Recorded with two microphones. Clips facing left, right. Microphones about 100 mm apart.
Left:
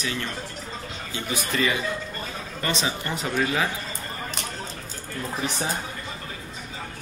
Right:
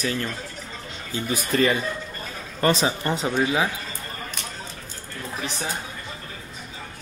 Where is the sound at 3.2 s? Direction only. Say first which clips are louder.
Right 1 dB; 20° right (ahead or behind).